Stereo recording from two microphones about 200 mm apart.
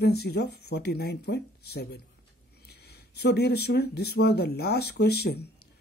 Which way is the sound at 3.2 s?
55° left (ahead or behind).